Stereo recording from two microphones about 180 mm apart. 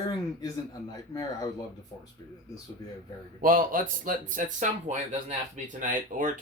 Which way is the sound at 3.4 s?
50° right (ahead or behind).